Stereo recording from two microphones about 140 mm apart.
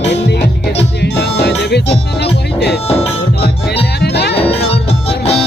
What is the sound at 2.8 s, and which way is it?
Music, 45° left (ahead or behind).